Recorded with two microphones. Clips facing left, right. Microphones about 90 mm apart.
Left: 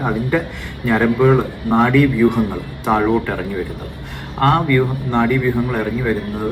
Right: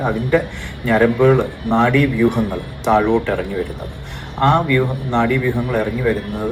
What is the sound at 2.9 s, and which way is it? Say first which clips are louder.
Speech: right 1 dB; 10° left (ahead or behind).